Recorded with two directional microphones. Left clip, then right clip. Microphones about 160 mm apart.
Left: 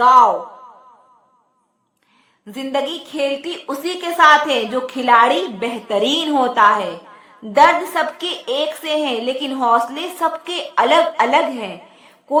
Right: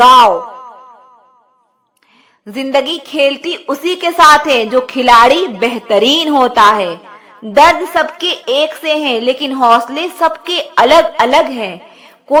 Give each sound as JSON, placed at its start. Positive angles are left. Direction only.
{"t": 2.5, "sound": "a woman's voice", "side_deg": -35}